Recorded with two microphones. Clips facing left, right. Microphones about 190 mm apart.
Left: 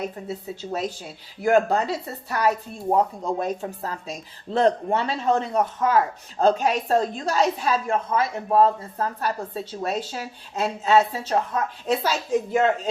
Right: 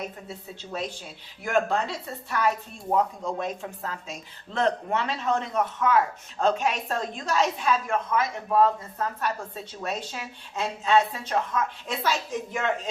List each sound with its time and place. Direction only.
0.7 s a woman's voice: 40° left (ahead or behind)
2.9 s a woman's voice: 40° left (ahead or behind)